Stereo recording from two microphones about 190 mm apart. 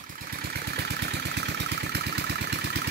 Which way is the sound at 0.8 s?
60° right (ahead or behind).